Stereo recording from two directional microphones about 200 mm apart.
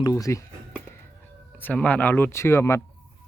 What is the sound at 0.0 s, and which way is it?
Speech, 15° left (ahead or behind).